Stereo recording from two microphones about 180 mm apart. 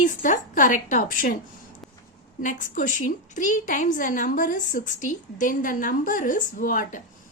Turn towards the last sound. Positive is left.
turn(degrees=50)  # may be behind; listen again after turning